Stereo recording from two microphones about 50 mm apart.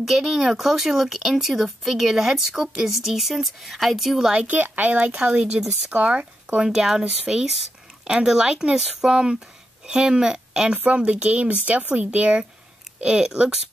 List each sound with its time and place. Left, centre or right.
0.0 s speech: centre
4.5 s speech: right
6.6 s speech: centre
10.7 s speech: right